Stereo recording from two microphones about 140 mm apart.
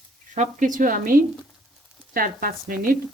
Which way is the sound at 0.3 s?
65° right (ahead or behind).